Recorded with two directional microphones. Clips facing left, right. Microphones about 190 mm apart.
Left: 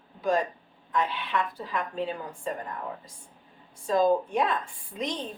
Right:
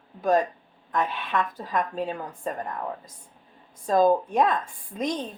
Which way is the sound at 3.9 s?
45° right (ahead or behind).